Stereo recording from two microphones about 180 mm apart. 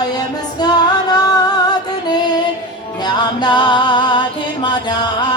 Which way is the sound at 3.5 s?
25° left (ahead or behind).